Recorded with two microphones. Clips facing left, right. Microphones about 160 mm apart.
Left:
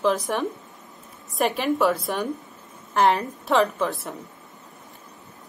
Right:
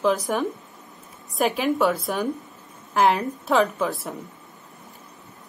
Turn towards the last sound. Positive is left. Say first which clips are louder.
# even
turn(degrees=0)  # may be behind; listen again after turning